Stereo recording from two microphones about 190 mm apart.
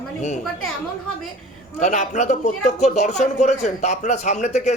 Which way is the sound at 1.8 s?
40° left (ahead or behind).